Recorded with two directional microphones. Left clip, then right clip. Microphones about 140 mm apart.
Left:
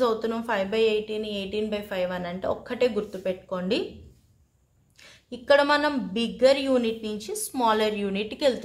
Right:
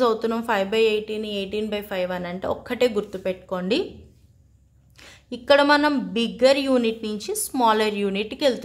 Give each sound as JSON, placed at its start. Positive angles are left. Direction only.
{"t": 0.0, "sound": "speech", "side_deg": -40}
{"t": 4.9, "sound": "speech", "side_deg": -35}